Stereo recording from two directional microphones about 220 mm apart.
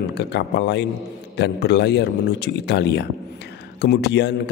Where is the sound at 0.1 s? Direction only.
50° left (ahead or behind).